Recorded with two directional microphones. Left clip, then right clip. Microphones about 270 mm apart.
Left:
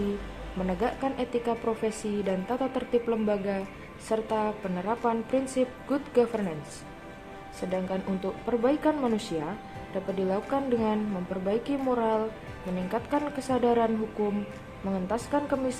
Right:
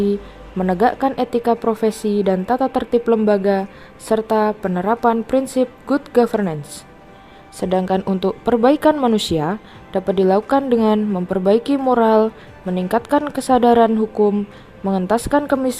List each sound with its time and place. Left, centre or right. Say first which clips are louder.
0.7 s speech: right 13 dB; right
7.6 s speech: right 13 dB; right